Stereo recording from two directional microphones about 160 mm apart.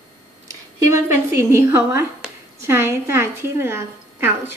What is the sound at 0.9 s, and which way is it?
A woman's voice, 15° right (ahead or behind).